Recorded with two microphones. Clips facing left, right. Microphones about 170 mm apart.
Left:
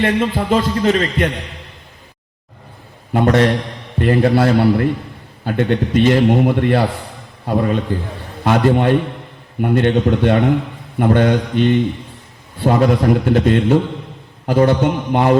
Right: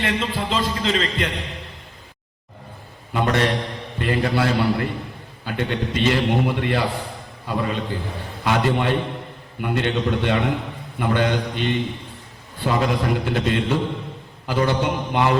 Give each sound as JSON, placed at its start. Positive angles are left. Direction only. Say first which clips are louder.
{"t": 0.0, "sound": "a man's voice", "louder": "left 7 dB", "side_deg": 50}
{"t": 3.1, "sound": "a man's voice", "louder": "left 7 dB", "side_deg": 45}
{"t": 12.6, "sound": "a man's voice", "louder": "left 7 dB", "side_deg": 50}